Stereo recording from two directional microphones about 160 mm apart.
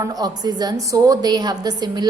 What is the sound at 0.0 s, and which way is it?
A woman's voice, 25° right (ahead or behind).